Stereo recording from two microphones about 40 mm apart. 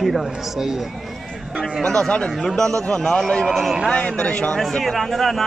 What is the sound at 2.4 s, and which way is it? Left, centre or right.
A man's voice, centre.